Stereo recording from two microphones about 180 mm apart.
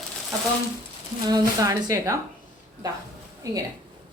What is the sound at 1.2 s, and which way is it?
Speech, 20° right (ahead or behind).